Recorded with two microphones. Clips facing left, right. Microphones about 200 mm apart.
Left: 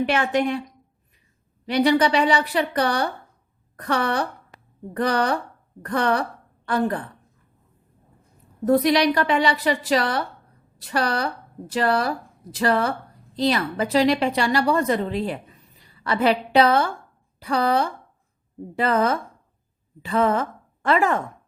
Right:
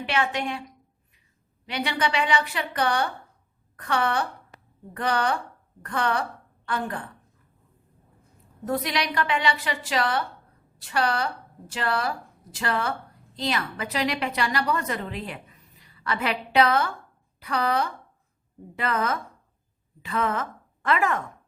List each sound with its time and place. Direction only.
0.0 s a woman's voice: 45° left (ahead or behind)
1.6 s a woman's voice: 40° left (ahead or behind)
8.6 s a woman's voice: 40° left (ahead or behind)